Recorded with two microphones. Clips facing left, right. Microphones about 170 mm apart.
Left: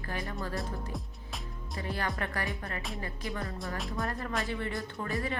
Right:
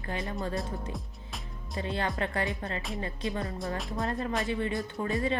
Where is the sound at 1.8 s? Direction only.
20° right (ahead or behind).